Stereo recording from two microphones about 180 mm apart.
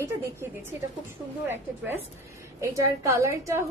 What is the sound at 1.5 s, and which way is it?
A woman's voice, 10° right (ahead or behind).